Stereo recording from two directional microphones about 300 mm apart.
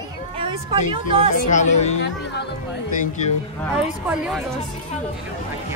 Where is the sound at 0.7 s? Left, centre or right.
Centre.